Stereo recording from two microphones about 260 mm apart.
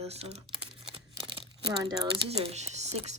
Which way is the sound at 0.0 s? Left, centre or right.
Right.